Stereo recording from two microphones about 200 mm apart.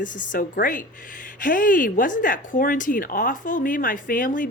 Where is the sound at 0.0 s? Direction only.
40° left (ahead or behind).